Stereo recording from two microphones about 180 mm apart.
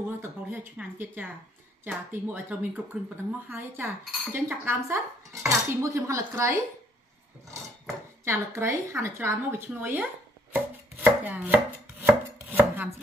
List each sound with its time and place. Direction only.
0.2 s speech: 10° right (ahead or behind)
8.3 s speech: 15° right (ahead or behind)
10.5 s chopping: 10° right (ahead or behind)